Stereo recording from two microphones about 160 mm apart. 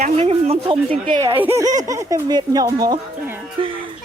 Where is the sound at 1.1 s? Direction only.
15° right (ahead or behind); by 3.7 s 30° right (ahead or behind).